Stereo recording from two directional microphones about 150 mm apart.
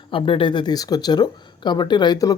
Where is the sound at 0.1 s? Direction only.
35° left (ahead or behind).